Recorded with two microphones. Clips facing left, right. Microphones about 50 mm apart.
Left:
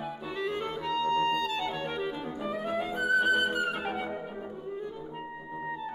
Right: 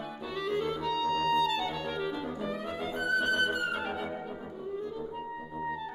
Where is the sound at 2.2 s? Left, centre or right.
Centre.